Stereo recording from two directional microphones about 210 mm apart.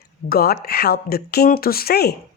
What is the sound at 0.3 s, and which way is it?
A man's voice, 45° left (ahead or behind).